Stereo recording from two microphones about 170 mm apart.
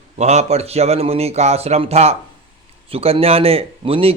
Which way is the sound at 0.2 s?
40° right (ahead or behind).